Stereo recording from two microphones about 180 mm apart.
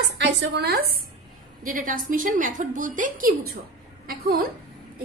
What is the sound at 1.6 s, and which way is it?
A woman's voice, 50° right (ahead or behind).